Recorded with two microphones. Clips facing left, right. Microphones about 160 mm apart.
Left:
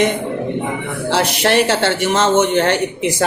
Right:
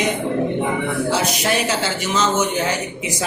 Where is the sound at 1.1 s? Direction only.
65° left (ahead or behind).